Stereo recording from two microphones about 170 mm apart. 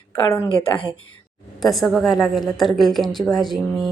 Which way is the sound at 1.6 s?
Centre (ahead or behind).